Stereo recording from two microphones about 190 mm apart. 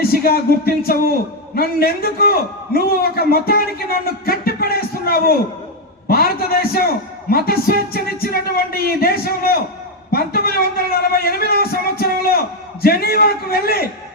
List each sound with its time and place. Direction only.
0.0 s a man's voice: 55° left (ahead or behind)